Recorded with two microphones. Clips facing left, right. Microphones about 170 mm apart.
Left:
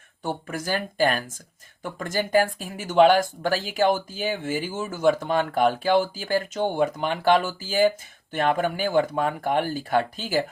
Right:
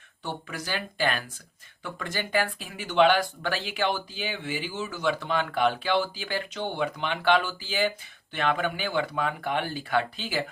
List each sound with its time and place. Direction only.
0.2 s speech: 45° left (ahead or behind)